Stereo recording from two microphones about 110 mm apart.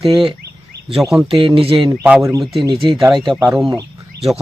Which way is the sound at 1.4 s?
55° right (ahead or behind).